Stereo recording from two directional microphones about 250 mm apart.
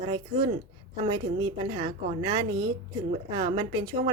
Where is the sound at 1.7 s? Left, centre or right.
Centre.